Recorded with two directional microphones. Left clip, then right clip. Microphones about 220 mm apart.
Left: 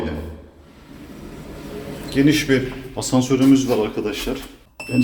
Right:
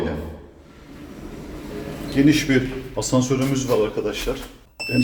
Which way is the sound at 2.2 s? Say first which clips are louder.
Left 1 dB; 15° left (ahead or behind).